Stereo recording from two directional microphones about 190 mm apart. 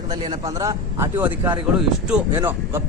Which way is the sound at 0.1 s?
20° right (ahead or behind).